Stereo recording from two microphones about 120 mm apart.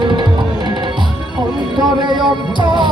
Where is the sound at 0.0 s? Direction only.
40° right (ahead or behind).